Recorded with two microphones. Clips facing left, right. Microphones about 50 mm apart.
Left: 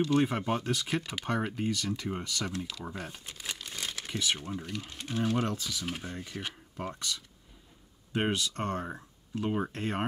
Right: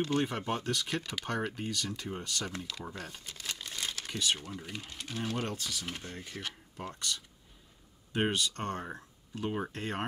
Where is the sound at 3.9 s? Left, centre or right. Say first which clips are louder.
Left 1 dB; left.